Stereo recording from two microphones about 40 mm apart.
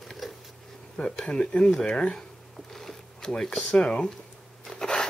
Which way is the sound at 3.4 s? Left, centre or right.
Centre.